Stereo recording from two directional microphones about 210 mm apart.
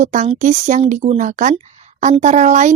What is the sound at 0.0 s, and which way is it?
A woman's voice, 35° right (ahead or behind).